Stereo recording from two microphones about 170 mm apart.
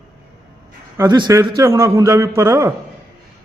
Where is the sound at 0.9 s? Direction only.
15° right (ahead or behind).